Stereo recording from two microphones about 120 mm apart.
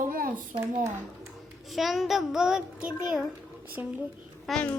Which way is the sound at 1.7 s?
Centre (ahead or behind).